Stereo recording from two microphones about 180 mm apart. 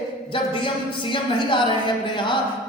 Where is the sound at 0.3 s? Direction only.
30° left (ahead or behind).